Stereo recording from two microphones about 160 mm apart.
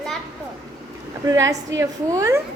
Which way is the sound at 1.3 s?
20° right (ahead or behind).